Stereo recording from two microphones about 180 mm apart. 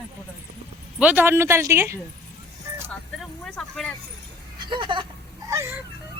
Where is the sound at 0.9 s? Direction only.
10° right (ahead or behind).